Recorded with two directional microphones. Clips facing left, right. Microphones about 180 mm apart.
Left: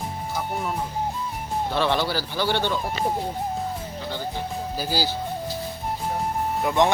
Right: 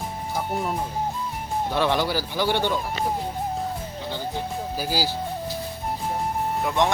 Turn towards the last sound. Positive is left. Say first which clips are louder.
# left 2 dB
turn(degrees=0)  # may be behind; listen again after turning